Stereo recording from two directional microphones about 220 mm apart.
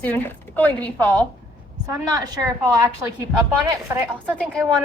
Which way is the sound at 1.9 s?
15° right (ahead or behind).